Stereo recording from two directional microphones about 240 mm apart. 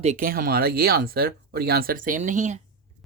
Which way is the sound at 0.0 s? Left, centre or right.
Right.